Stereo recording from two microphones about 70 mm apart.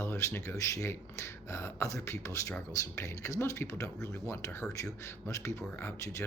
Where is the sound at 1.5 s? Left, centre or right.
Left.